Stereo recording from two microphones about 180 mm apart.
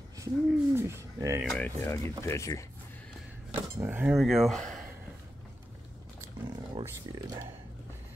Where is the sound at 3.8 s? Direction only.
10° right (ahead or behind).